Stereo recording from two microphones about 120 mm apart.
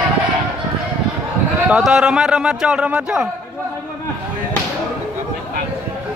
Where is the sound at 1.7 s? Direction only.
5° right (ahead or behind).